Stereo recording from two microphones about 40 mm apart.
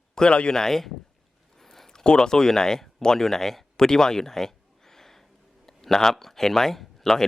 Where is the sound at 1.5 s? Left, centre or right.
Centre.